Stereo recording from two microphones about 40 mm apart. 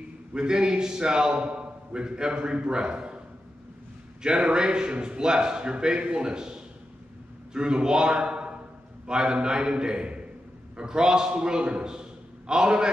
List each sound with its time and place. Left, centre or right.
0.3 s a man's voice: right
4.5 s a man's voice: centre